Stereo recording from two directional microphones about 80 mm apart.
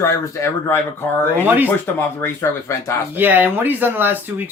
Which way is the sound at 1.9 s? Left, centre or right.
Left.